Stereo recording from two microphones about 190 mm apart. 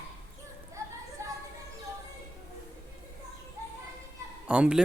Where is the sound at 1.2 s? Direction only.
15° right (ahead or behind).